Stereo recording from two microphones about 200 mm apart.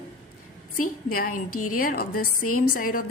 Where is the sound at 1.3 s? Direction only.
90° left.